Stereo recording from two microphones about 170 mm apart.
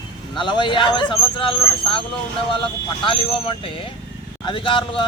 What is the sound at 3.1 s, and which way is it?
Speech, 30° left (ahead or behind).